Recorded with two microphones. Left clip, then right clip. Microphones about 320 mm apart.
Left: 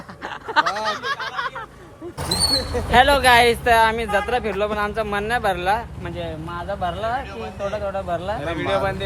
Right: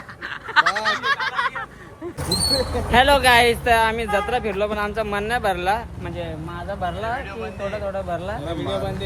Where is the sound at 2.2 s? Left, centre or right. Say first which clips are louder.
Left 2 dB; centre.